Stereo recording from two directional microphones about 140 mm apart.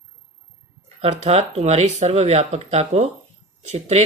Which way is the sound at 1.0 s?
50° right (ahead or behind).